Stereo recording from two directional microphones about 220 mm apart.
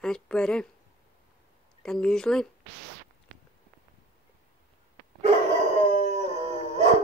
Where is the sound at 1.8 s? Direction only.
5° left (ahead or behind).